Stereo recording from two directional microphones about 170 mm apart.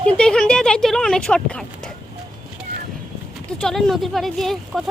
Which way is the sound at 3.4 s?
5° left (ahead or behind).